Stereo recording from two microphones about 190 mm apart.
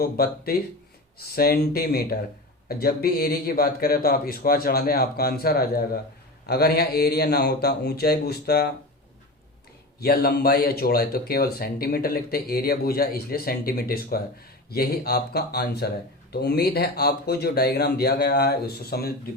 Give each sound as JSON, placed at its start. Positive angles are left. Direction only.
{"t": 0.0, "sound": "speech", "side_deg": 50}
{"t": 10.0, "sound": "speech", "side_deg": 55}